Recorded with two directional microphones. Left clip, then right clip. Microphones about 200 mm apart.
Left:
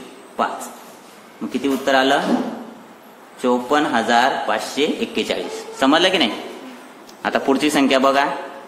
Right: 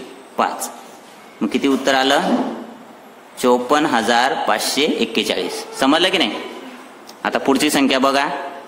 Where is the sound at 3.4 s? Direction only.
30° right (ahead or behind).